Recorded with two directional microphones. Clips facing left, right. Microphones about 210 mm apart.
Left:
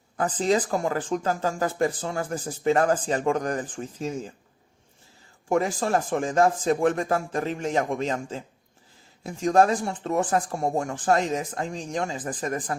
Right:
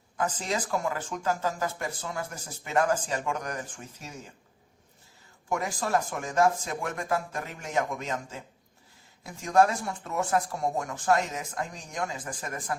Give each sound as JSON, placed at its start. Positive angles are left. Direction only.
{"t": 0.2, "sound": "speech", "side_deg": 35}
{"t": 5.5, "sound": "speech", "side_deg": 30}